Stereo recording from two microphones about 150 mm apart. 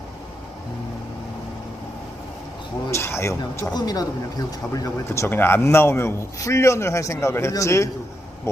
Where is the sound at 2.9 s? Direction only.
20° left (ahead or behind).